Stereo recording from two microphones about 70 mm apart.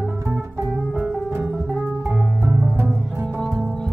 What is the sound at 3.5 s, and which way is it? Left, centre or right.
Music, centre.